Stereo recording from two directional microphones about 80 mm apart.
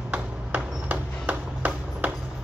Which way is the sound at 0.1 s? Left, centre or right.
Centre.